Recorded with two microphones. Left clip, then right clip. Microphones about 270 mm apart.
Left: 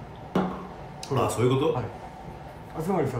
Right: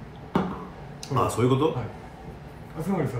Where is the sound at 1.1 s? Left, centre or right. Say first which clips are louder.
Right 1 dB; centre.